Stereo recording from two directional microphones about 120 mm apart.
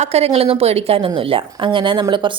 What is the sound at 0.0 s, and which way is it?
A woman's voice, 65° right (ahead or behind).